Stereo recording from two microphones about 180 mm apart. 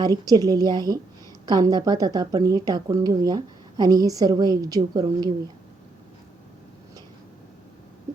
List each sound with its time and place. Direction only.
0.0 s speech: 20° right (ahead or behind)